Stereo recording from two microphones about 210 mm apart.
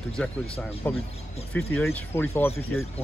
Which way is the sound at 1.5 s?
10° left (ahead or behind).